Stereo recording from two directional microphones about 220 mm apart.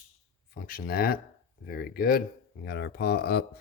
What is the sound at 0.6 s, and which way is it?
Speech, 40° left (ahead or behind).